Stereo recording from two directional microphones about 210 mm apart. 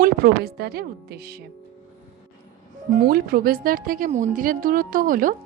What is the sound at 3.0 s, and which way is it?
A woman's voice, 45° right (ahead or behind).